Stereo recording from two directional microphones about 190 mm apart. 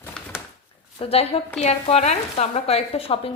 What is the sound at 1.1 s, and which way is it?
A woman's voice, 30° left (ahead or behind).